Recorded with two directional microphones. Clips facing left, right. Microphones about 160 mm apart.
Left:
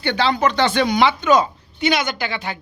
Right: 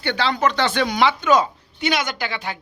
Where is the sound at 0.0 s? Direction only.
5° right (ahead or behind).